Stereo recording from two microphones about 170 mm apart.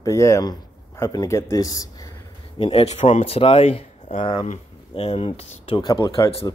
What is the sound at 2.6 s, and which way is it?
Speech, 35° left (ahead or behind).